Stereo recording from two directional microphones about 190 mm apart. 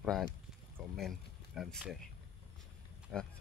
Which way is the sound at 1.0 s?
Centre (ahead or behind).